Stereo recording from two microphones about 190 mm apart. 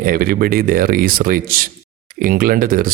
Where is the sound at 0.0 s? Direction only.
50° right (ahead or behind).